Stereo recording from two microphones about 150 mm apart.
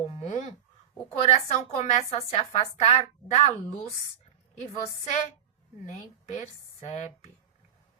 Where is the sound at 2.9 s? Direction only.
50° left (ahead or behind).